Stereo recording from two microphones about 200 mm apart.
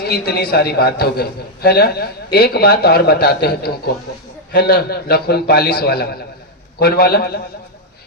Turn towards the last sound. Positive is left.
turn(degrees=50)  # may be behind; listen again after turning